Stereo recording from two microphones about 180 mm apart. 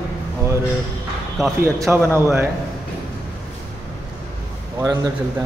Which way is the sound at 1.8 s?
15° right (ahead or behind).